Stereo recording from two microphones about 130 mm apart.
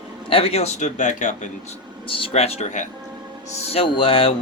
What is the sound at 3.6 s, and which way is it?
Speech, 45° left (ahead or behind).